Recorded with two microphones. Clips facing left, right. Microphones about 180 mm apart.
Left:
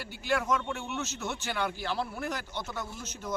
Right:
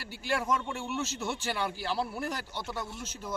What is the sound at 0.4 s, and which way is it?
Speech, 10° right (ahead or behind).